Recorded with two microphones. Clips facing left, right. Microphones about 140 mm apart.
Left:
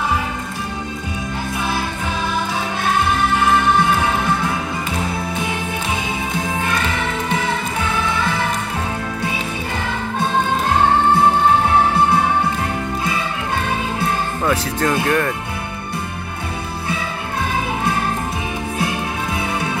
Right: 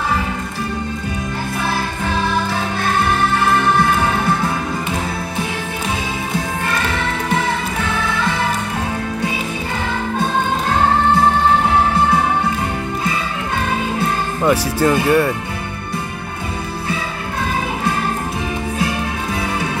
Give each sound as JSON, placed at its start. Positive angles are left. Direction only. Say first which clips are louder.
{"t": 14.4, "sound": "speech", "louder": "right 6 dB", "side_deg": -10}